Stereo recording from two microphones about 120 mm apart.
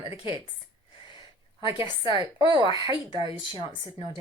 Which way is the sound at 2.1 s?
35° right (ahead or behind).